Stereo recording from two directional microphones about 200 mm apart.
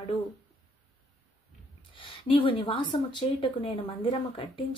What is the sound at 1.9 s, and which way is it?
A woman's voice, 25° left (ahead or behind).